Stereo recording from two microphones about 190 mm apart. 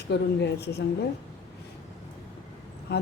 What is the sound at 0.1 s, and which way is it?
Speech, 60° left (ahead or behind).